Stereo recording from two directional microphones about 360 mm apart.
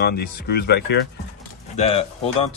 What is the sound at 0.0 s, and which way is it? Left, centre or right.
Speech, left.